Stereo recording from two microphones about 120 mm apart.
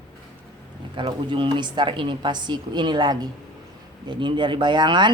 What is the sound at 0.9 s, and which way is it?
Speech, 45° right (ahead or behind).